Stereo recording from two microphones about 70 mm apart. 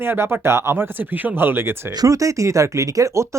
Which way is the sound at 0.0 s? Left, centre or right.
Right.